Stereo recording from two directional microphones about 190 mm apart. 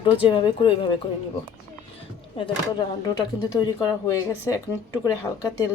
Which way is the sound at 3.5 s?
20° left (ahead or behind).